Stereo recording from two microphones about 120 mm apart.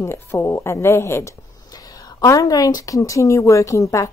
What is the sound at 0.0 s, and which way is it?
A woman's voice, 20° left (ahead or behind).